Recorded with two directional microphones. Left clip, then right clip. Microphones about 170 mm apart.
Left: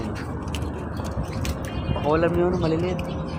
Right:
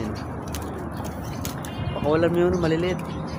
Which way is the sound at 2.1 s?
30° right (ahead or behind).